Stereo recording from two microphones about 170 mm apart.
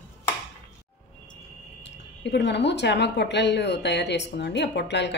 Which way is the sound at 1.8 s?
90° left.